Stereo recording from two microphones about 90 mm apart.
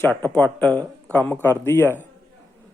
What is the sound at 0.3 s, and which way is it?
Speech, 20° left (ahead or behind).